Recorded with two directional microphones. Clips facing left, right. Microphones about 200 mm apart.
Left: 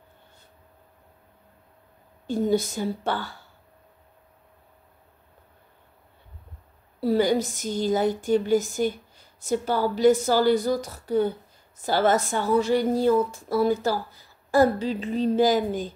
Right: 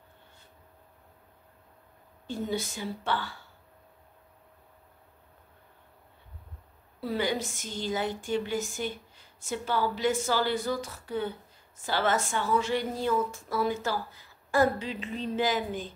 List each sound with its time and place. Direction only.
2.2 s a woman's voice: 40° left (ahead or behind)
7.0 s a woman's voice: 40° left (ahead or behind)